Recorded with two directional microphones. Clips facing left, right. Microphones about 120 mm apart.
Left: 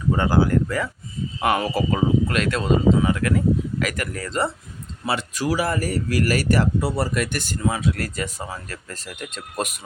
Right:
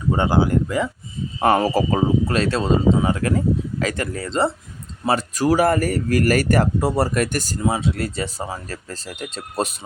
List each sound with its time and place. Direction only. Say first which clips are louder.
0.1 s speech: right 1 dB; 25° right (ahead or behind)
1.4 s speech: right 4 dB; 35° right (ahead or behind)
5.0 s speech: right 5 dB; 40° right (ahead or behind)
7.6 s speech: right 2 dB; 25° right (ahead or behind)